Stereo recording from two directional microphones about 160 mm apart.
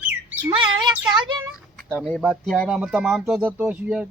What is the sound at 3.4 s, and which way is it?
Speech, 10° right (ahead or behind).